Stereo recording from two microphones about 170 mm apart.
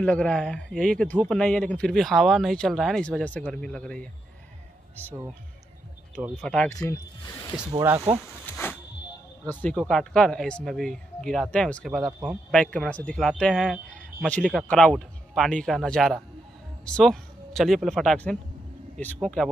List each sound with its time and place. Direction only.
0.0 s speech: 5° left (ahead or behind)
4.9 s speech: 15° right (ahead or behind)
6.2 s speech: centre (ahead or behind)
6.9 s speech: 20° left (ahead or behind)
8.1 s speech: 5° right (ahead or behind)
8.5 s a sound: 10° left (ahead or behind)
9.6 s speech: 5° left (ahead or behind)
12.1 s speech: 10° right (ahead or behind)
12.4 s speech: 5° left (ahead or behind)